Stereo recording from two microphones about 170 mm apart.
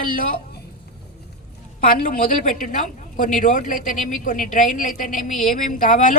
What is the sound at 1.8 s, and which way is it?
Speech, 55° left (ahead or behind).